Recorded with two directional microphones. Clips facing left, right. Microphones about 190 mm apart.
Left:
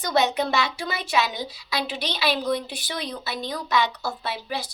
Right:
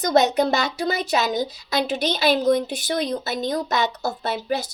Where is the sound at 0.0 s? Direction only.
40° right (ahead or behind).